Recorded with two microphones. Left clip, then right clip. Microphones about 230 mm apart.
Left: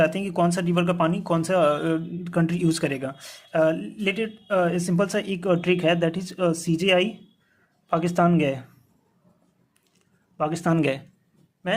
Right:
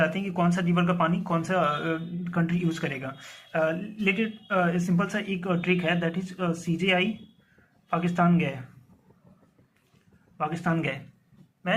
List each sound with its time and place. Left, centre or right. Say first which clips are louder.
0.0 s speech: left 4 dB; left
10.3 s speech: left 5 dB; left